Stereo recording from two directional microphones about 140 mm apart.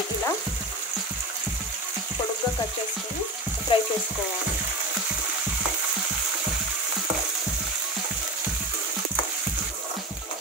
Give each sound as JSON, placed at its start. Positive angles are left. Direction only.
{"t": 3.7, "sound": "frying", "side_deg": 40}